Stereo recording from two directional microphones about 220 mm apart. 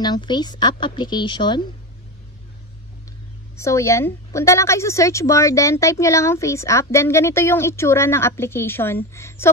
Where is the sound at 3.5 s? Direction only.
15° left (ahead or behind).